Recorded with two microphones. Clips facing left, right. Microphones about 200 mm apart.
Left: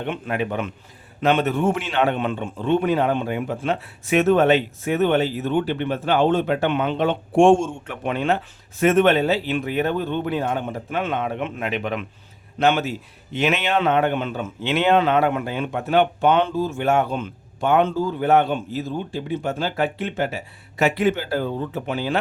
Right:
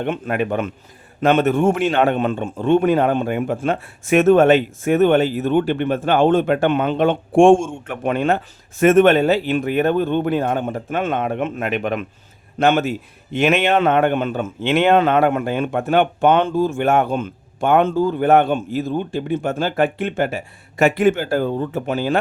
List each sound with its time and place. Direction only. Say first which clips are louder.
0.0 s a man's voice: right 4 dB; 50° right (ahead or behind)